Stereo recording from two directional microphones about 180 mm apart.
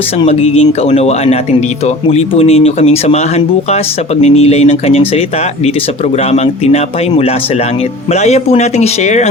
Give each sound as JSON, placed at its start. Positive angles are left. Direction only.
{"t": 0.2, "sound": "speech", "side_deg": 35}
{"t": 6.3, "sound": "speech", "side_deg": 35}